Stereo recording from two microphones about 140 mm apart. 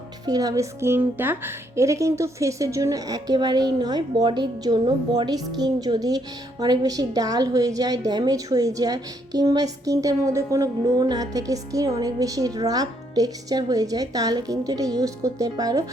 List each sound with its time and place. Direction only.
0.3 s a woman's voice: 25° right (ahead or behind)